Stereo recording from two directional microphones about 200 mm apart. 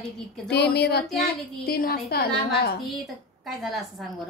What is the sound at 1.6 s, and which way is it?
A woman's voice, 50° left (ahead or behind).